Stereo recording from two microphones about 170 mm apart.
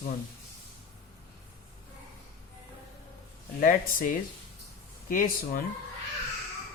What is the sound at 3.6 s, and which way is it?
Speech, 55° left (ahead or behind).